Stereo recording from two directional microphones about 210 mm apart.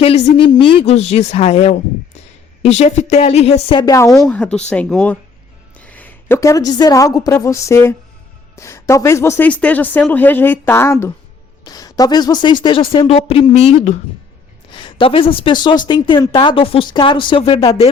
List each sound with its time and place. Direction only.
0.0 s a woman's voice: 30° left (ahead or behind)